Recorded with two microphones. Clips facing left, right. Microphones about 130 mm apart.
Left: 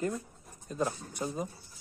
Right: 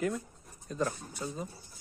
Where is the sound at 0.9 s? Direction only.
15° left (ahead or behind).